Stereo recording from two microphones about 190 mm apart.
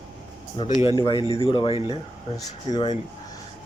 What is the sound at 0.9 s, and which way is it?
Speech, 20° left (ahead or behind).